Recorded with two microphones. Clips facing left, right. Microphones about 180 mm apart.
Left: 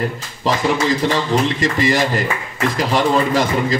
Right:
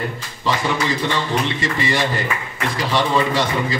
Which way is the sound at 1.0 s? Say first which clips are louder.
Left 4 dB; 40° left (ahead or behind).